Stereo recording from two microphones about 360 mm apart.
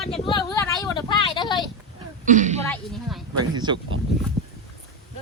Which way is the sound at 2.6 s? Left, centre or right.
Centre.